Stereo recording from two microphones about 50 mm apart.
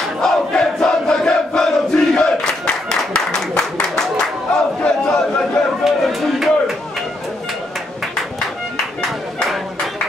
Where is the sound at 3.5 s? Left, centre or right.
Centre.